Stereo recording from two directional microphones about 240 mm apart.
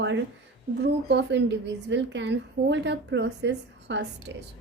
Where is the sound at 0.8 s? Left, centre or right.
Right.